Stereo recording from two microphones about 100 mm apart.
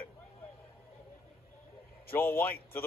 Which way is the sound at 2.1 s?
20° left (ahead or behind).